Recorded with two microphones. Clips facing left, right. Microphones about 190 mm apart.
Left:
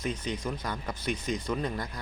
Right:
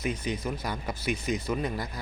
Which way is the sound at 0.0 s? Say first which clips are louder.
Right 2 dB; 10° right (ahead or behind).